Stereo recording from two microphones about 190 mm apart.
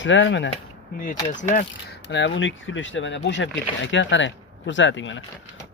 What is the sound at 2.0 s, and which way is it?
Speech, 70° left (ahead or behind).